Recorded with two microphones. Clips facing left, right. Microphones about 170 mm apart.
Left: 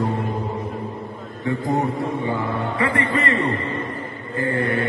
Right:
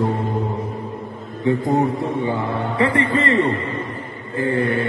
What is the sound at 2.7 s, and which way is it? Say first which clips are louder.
Mantra: right 5 dB; 30° right (ahead or behind).